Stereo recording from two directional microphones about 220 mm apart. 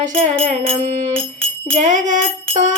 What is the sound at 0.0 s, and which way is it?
Music, 35° right (ahead or behind).